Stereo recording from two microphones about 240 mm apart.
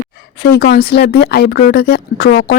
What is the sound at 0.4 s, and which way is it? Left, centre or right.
Speech, left.